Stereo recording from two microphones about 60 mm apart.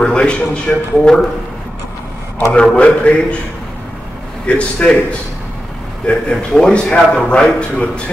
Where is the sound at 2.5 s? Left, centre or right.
Centre.